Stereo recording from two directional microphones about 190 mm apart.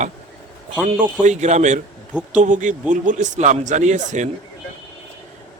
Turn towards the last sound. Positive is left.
turn(degrees=-40)  # may be behind; listen again after turning